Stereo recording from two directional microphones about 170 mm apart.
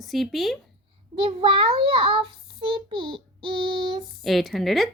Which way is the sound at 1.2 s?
35° right (ahead or behind).